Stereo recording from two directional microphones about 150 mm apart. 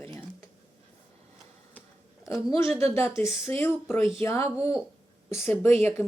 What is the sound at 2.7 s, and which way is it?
Speech, 15° left (ahead or behind).